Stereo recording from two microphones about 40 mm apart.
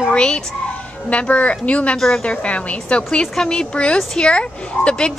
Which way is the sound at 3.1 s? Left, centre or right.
Centre.